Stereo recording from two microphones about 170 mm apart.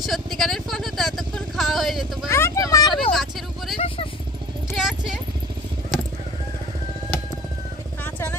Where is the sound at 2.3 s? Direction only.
15° left (ahead or behind).